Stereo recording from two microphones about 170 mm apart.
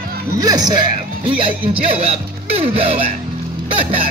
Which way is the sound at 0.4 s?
25° right (ahead or behind).